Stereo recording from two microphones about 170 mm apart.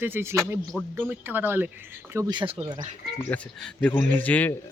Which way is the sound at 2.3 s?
30° right (ahead or behind).